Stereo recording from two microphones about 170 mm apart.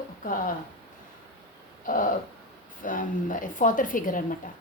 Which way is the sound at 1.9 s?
50° left (ahead or behind).